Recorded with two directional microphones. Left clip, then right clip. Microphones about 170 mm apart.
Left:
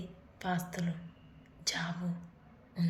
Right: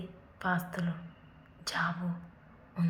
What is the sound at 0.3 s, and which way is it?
A woman's voice, 20° left (ahead or behind).